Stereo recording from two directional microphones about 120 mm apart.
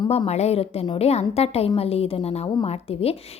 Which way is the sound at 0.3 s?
60° left (ahead or behind).